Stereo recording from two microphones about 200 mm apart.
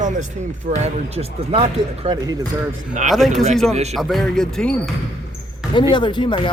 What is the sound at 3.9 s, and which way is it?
Speech, centre (ahead or behind).